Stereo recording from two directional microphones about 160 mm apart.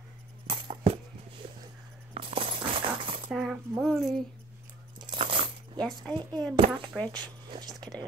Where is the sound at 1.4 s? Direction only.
35° right (ahead or behind).